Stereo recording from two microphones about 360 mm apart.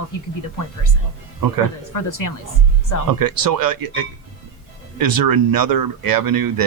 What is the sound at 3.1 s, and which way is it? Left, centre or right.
Speech, right.